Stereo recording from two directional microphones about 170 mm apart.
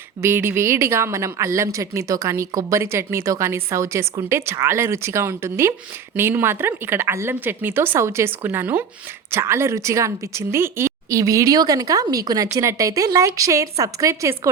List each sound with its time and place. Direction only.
0.2 s a woman's voice: 15° right (ahead or behind)